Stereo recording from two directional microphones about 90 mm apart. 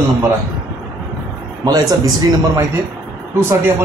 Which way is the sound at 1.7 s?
45° right (ahead or behind).